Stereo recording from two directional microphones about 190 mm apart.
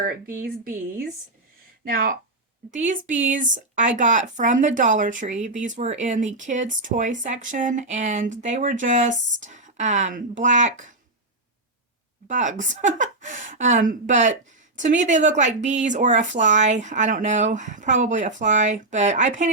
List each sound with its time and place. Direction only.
0.4 s speech: 50° right (ahead or behind)
12.3 s speech: 40° right (ahead or behind)